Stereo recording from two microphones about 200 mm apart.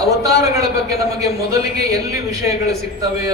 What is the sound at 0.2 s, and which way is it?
A man's voice, 15° right (ahead or behind).